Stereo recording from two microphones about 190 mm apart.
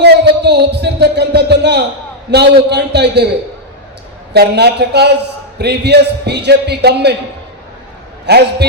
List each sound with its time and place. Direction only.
0.0 s a man's voice: 60° right (ahead or behind)
4.4 s a man's voice: 60° right (ahead or behind)
8.3 s a man's voice: 60° right (ahead or behind)